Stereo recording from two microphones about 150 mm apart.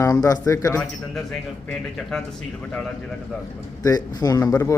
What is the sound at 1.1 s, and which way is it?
A man's voice, 5° left (ahead or behind).